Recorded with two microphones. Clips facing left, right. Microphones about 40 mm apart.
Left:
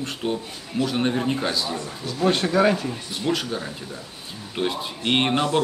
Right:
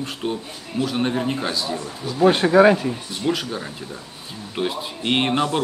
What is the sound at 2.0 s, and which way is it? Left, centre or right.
Speech, centre.